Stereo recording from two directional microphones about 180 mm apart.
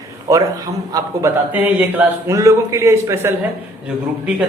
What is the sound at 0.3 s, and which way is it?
A man's voice, 20° right (ahead or behind).